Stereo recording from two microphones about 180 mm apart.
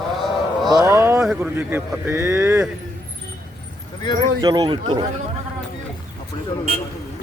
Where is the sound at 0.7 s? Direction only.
15° right (ahead or behind).